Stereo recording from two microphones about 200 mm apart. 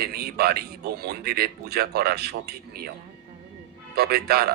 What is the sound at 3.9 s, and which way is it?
Speech, 50° right (ahead or behind).